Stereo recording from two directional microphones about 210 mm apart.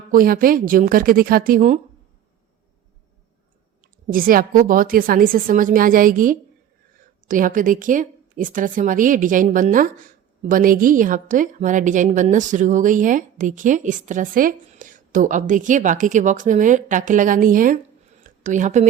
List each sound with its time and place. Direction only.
0.1 s a woman's voice: 40° right (ahead or behind)
4.0 s speech: 40° right (ahead or behind)
18.2 s a sound: 35° right (ahead or behind)